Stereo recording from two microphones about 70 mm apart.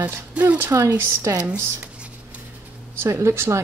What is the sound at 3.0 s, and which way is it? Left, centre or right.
Speech, right.